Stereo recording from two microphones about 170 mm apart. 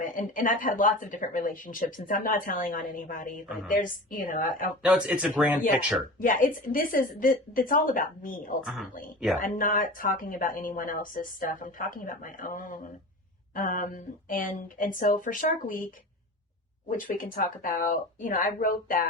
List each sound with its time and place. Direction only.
0.0 s speech: 50° left (ahead or behind)
4.8 s speech: 5° right (ahead or behind)
6.1 s speech: 55° left (ahead or behind)
8.6 s a man's voice: centre (ahead or behind)
9.4 s speech: 55° left (ahead or behind)
17.0 s speech: 55° left (ahead or behind)